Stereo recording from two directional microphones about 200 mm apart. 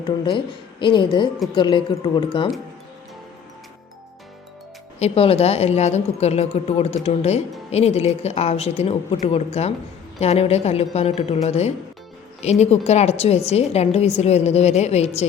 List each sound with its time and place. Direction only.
0.0 s a woman's voice: 25° left (ahead or behind)
4.9 s a woman's voice: 30° left (ahead or behind)